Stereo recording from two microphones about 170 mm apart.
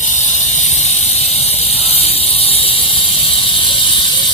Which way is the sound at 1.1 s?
35° left (ahead or behind).